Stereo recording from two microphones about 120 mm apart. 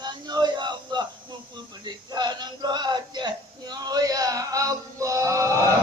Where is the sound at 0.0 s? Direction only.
35° right (ahead or behind).